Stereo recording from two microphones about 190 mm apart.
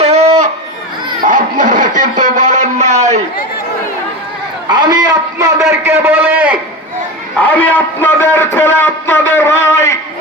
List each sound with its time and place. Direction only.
0.0 s a sound: 35° right (ahead or behind)
1.2 s music: 45° right (ahead or behind)
4.7 s a man's voice: 25° right (ahead or behind)
7.4 s a man's voice: 10° left (ahead or behind)